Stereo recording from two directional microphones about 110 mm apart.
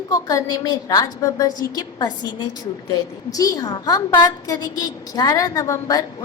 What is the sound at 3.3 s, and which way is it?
A woman's voice, 30° left (ahead or behind).